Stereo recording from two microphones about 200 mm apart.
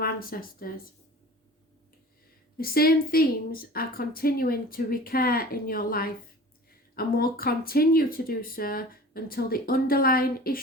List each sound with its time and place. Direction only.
0.0 s speech: 45° left (ahead or behind)
2.6 s speech: 50° left (ahead or behind)